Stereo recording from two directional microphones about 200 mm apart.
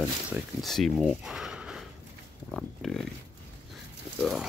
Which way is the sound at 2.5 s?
5° left (ahead or behind).